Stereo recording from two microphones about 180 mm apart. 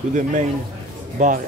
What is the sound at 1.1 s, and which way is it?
Speech, 45° right (ahead or behind).